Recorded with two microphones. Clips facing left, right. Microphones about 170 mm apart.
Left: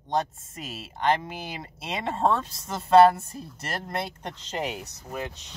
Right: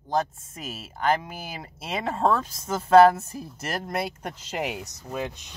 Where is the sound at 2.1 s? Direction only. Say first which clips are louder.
Right 1 dB; 25° left (ahead or behind).